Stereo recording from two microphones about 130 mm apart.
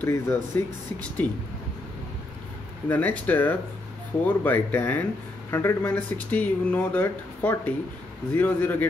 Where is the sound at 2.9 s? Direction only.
15° left (ahead or behind).